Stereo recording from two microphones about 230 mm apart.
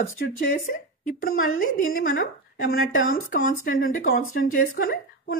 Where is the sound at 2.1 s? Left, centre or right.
Left.